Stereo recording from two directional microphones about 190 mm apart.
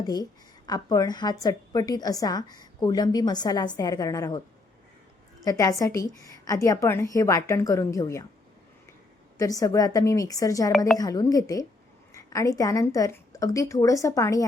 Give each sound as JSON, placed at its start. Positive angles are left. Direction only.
{"t": 0.0, "sound": "a woman's voice", "side_deg": 20}
{"t": 5.5, "sound": "a woman's voice", "side_deg": 20}
{"t": 9.4, "sound": "a woman's voice", "side_deg": 20}